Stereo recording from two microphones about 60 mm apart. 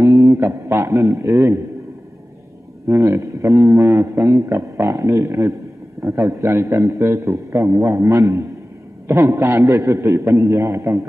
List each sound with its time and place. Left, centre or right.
0.0 s a sound: right
0.4 s a man's voice: right
2.9 s a man's voice: right
9.0 s a man's voice: right
9.7 s a man's voice: right